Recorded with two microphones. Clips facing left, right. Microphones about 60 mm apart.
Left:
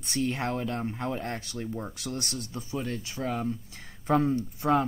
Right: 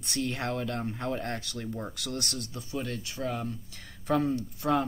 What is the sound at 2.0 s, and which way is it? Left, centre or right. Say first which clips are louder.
Speech: even; left.